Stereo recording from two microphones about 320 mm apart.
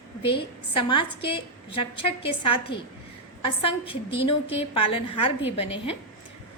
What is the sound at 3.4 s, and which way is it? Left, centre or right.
A woman's voice, centre.